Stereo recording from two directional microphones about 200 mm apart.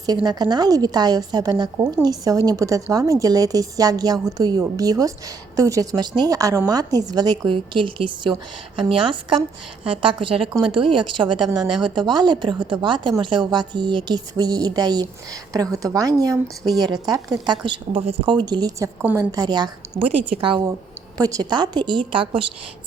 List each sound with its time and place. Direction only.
0.3 s a woman's voice: 20° right (ahead or behind)